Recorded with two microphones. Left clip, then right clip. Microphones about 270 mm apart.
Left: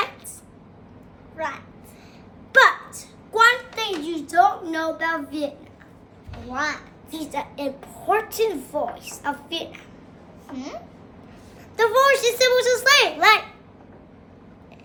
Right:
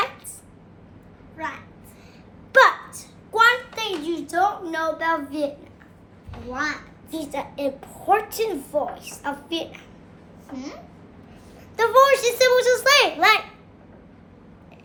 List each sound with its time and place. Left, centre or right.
1.4 s a child's voice: centre
2.5 s a sound: centre
6.5 s a child's voice: centre
7.1 s a woman's voice: centre
10.5 s a child's voice: centre
11.8 s a child's voice: centre